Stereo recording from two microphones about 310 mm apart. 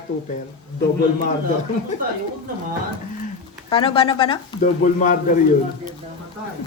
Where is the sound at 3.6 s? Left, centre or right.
Centre.